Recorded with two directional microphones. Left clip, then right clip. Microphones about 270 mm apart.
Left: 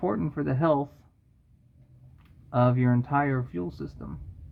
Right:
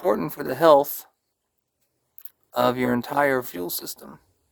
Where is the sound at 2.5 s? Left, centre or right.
Right.